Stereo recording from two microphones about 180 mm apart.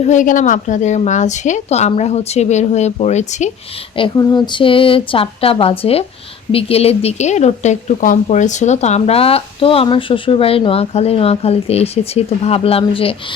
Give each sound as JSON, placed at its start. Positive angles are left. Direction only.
{"t": 0.0, "sound": "speech", "side_deg": 45}
{"t": 3.9, "sound": "speech", "side_deg": 25}